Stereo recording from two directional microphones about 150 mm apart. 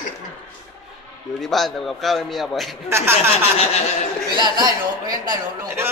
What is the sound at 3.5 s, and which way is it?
Speech, 45° left (ahead or behind).